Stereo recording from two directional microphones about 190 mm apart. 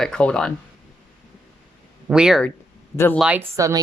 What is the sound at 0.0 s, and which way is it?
Speech, 5° left (ahead or behind).